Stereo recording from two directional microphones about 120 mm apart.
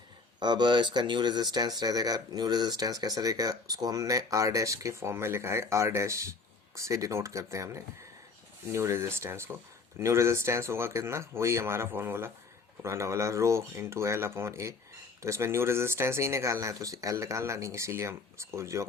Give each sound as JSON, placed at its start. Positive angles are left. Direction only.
{"t": 0.3, "sound": "speech", "side_deg": -40}